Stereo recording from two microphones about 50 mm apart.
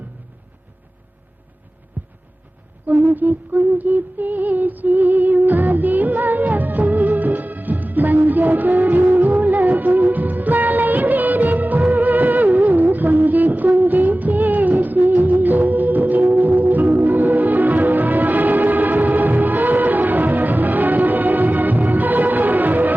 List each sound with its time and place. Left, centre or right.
2.0 s heart sounds: right
2.8 s music: right